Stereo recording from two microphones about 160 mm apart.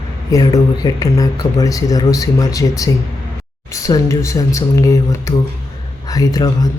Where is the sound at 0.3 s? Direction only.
20° left (ahead or behind).